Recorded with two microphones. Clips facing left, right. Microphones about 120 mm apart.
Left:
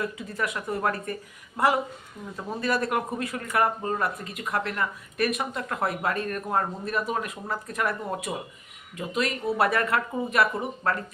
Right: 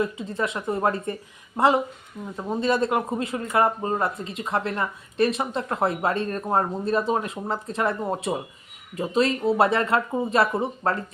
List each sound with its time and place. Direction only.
0.0 s speech: 25° right (ahead or behind)